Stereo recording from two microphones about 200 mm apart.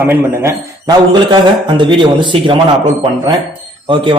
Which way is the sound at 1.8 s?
25° right (ahead or behind).